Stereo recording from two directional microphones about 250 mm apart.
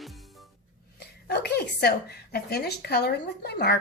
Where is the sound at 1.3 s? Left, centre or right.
Left.